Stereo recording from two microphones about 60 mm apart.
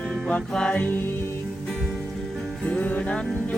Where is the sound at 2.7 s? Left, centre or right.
Left.